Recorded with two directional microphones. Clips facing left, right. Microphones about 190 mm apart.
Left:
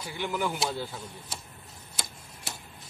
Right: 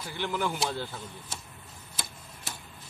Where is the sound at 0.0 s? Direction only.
5° left (ahead or behind).